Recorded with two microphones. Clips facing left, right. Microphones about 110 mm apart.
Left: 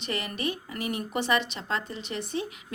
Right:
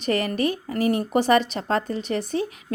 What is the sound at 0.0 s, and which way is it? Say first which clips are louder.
Speech: right 9 dB; 45° right (ahead or behind).